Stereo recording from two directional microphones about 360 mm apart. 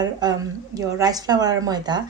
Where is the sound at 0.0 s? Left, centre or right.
Centre.